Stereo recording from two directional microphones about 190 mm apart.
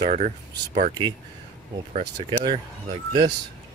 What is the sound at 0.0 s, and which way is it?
Speech, 40° right (ahead or behind).